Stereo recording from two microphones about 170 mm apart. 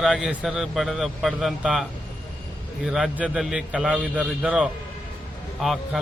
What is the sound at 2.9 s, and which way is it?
A man's voice, centre (ahead or behind).